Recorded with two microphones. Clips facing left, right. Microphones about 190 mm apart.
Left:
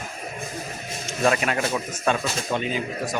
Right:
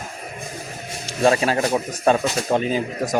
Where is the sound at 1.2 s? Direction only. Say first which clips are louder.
Right 4 dB; 30° right (ahead or behind).